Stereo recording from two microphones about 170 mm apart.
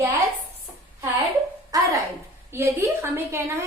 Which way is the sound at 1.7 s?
20° right (ahead or behind).